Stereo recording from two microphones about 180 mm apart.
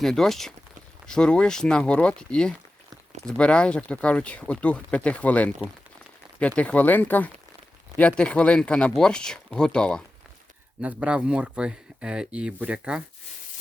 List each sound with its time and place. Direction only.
0.0 s speech: centre (ahead or behind)
6.6 s speech: 10° left (ahead or behind)
10.8 s speech: 5° right (ahead or behind)